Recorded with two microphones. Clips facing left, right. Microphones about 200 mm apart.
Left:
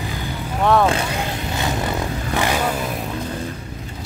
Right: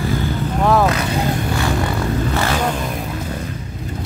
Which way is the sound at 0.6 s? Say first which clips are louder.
Right 1 dB; centre (ahead or behind).